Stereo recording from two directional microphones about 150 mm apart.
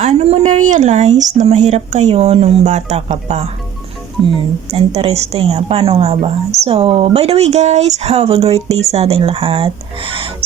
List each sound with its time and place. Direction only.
0.0 s a woman's voice: 45° right (ahead or behind)
4.2 s speech: centre (ahead or behind)
4.7 s a woman's voice: 40° right (ahead or behind)